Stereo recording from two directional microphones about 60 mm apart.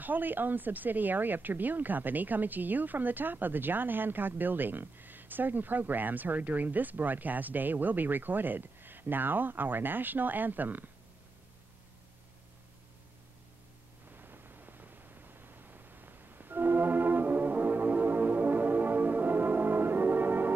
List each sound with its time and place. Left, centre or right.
0.0 s speech: right
14.1 s white noise: right